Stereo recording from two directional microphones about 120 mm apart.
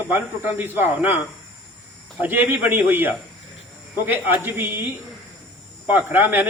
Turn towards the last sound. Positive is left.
turn(degrees=-15)  # may be behind; listen again after turning